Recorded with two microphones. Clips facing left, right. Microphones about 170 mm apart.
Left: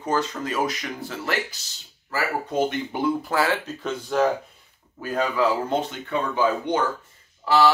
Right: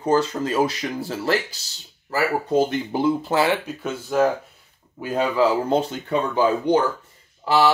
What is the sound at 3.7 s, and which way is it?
Speech, 5° right (ahead or behind).